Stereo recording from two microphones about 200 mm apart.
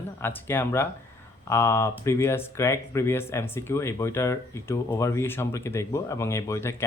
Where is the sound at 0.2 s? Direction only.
10° left (ahead or behind).